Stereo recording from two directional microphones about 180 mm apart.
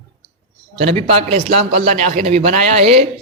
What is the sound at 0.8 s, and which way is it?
A man's voice, 35° right (ahead or behind).